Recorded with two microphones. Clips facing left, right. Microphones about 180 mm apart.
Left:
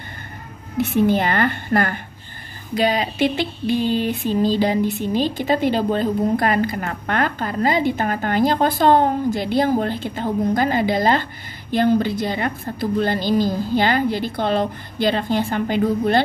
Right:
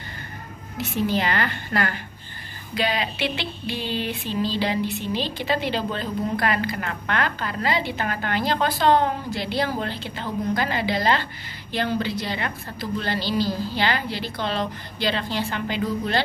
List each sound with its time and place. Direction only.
0.7 s a woman's voice: 55° left (ahead or behind)